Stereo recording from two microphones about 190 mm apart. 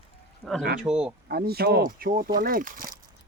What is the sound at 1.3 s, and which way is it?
Speech, 55° right (ahead or behind).